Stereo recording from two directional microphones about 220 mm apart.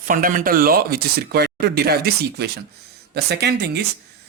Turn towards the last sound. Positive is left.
turn(degrees=-50)  # may be behind; listen again after turning